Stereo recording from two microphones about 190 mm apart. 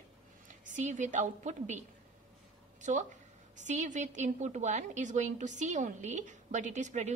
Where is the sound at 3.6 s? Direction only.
40° right (ahead or behind).